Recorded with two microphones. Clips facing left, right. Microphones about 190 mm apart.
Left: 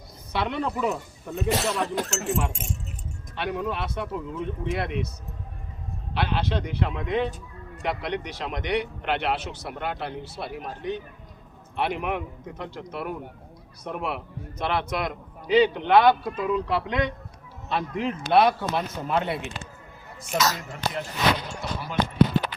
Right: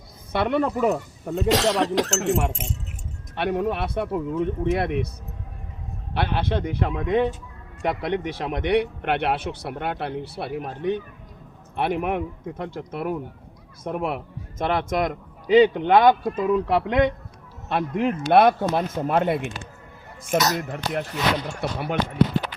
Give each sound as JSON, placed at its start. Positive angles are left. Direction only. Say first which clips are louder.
{"t": 0.3, "sound": "speech", "louder": "right 5 dB", "side_deg": -50}
{"t": 1.5, "sound": "speech", "louder": "right 5 dB", "side_deg": -90}
{"t": 2.1, "sound": "speech", "louder": "right 5 dB", "side_deg": -70}
{"t": 3.3, "sound": "a man's voice", "louder": "right 5 dB", "side_deg": -55}
{"t": 6.1, "sound": "a man's voice", "louder": "right 2 dB", "side_deg": -55}